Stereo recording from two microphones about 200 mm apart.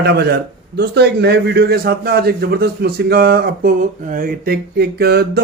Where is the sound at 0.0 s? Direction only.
55° right (ahead or behind).